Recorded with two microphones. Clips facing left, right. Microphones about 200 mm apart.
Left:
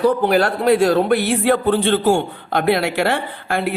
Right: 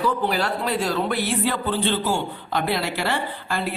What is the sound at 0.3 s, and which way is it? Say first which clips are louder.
A man's voice: left 9 dB; 55° left (ahead or behind).